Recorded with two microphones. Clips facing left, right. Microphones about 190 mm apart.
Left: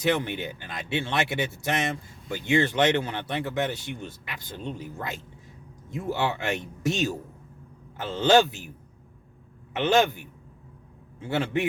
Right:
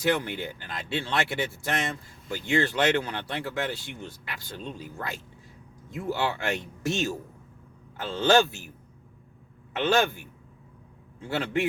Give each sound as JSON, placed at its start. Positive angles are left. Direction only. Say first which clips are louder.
{"t": 0.0, "sound": "a man's voice", "louder": "left 1 dB", "side_deg": 20}
{"t": 9.7, "sound": "speech", "louder": "left 2 dB", "side_deg": 20}